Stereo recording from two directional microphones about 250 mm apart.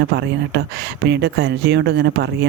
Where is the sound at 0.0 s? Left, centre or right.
Right.